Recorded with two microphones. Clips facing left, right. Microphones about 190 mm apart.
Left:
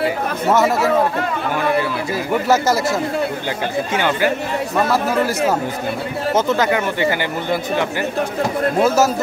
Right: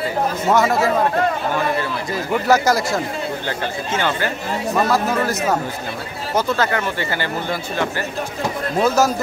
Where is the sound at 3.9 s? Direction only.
15° left (ahead or behind).